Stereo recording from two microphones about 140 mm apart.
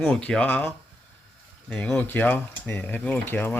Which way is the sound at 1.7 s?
5° left (ahead or behind).